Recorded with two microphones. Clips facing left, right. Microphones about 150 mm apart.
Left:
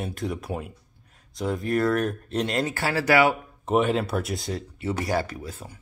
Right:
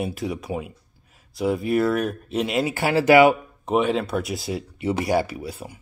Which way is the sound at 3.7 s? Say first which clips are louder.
Right 1 dB; centre (ahead or behind).